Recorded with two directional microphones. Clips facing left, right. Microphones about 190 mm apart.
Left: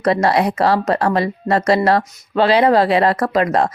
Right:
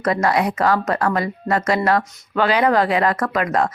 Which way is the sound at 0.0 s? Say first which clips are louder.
Left 3 dB; 35° left (ahead or behind).